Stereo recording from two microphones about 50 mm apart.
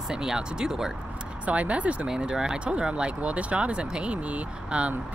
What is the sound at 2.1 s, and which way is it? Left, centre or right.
Speech, centre.